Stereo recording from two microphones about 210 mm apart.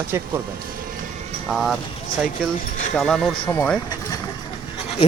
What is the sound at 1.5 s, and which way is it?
Speech, centre (ahead or behind).